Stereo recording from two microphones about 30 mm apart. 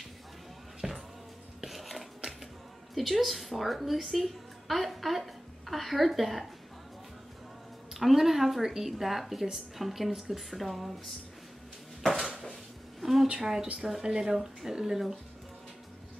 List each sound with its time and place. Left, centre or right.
0.8 s music: right
1.6 s dishes: centre
2.9 s a woman's voice: centre
7.9 s speech: centre
13.0 s a woman's voice: centre